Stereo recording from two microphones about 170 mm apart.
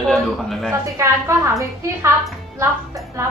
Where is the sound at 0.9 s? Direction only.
15° right (ahead or behind).